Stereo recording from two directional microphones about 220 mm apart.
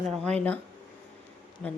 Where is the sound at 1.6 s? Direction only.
5° left (ahead or behind).